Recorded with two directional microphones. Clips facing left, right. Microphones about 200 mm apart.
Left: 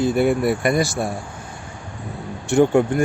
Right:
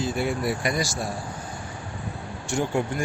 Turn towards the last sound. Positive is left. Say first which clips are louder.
# left 10 dB
turn(degrees=60)  # may be behind; listen again after turning